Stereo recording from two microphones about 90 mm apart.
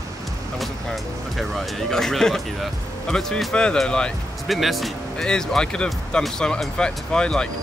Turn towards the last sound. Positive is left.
turn(degrees=10)  # may be behind; listen again after turning